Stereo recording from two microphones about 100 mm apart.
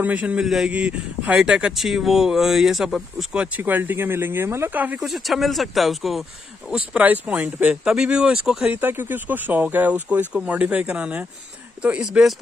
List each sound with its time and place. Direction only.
0.0 s a man's voice: 15° right (ahead or behind)
3.5 s speech: 20° right (ahead or behind)
4.9 s a man's voice: centre (ahead or behind)
6.7 s speech: 10° right (ahead or behind)
8.7 s speech: 20° right (ahead or behind)